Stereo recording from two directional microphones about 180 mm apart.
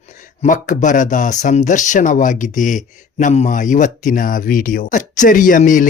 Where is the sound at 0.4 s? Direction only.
45° left (ahead or behind).